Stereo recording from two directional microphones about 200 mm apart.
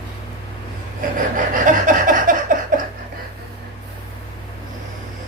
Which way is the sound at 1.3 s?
40° right (ahead or behind).